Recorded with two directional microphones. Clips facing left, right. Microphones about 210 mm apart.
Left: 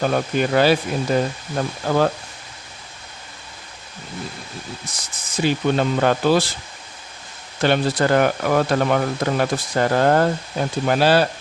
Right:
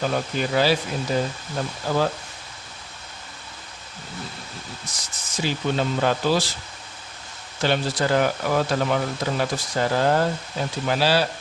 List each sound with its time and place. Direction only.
0.0 s speech: 55° left (ahead or behind)
5.4 s speech: 55° left (ahead or behind)
7.6 s speech: 55° left (ahead or behind)